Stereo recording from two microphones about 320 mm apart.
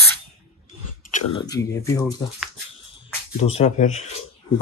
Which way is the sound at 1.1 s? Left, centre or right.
Centre.